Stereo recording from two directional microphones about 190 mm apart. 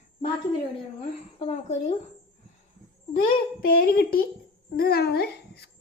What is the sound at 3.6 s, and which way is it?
A child's voice, 50° left (ahead or behind).